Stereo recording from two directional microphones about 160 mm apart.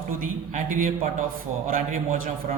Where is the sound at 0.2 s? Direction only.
55° right (ahead or behind).